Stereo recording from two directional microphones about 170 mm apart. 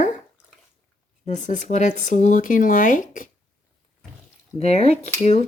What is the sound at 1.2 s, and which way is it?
Speech, 45° left (ahead or behind).